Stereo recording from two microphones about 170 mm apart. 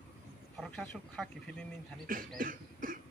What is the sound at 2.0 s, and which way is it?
Beatboxing, 55° right (ahead or behind).